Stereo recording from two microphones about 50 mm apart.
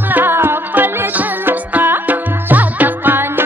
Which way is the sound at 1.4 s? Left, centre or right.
Right.